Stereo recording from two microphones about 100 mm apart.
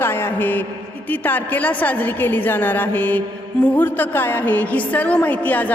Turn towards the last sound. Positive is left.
turn(degrees=15)  # may be behind; listen again after turning